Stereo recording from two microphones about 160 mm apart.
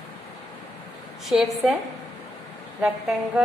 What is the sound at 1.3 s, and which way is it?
Speech, centre (ahead or behind).